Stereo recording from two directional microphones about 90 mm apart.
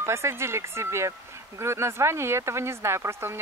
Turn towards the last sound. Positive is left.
turn(degrees=-30)  # may be behind; listen again after turning